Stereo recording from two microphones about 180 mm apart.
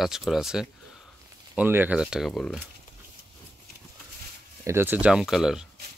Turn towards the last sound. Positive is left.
turn(degrees=0)  # may be behind; listen again after turning